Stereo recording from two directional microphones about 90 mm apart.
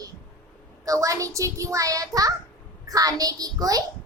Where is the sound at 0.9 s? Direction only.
40° right (ahead or behind).